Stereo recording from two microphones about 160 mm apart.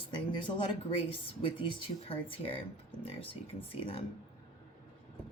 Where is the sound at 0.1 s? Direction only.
30° left (ahead or behind).